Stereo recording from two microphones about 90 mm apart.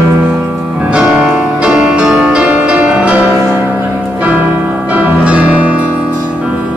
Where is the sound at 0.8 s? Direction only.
10° right (ahead or behind).